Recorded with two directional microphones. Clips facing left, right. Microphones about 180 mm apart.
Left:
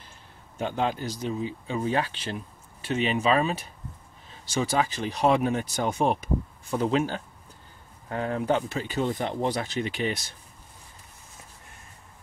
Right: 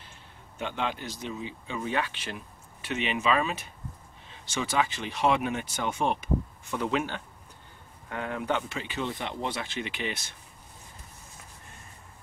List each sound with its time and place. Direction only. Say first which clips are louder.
0.6 s speech: left 5 dB; 40° left (ahead or behind)